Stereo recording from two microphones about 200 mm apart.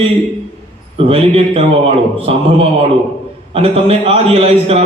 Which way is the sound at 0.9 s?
30° right (ahead or behind).